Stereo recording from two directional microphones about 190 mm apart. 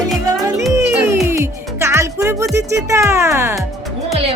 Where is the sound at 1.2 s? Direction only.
15° right (ahead or behind).